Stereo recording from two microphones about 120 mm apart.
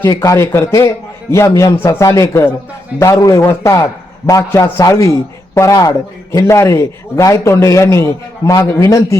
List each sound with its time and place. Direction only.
0.0 s a man's voice: 25° left (ahead or behind)